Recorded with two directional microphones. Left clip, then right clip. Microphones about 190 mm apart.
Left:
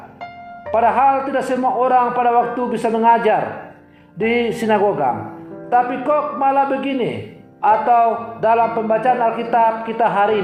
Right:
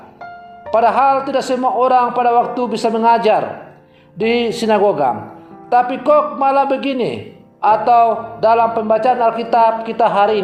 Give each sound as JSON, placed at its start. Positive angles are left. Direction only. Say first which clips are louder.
{"t": 0.7, "sound": "a man's voice", "louder": "right 2 dB", "side_deg": -40}